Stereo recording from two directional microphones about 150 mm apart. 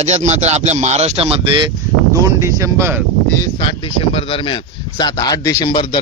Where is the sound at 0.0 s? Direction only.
50° right (ahead or behind).